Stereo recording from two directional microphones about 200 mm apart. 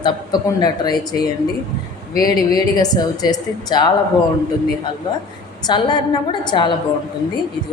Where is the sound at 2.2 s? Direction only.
20° left (ahead or behind).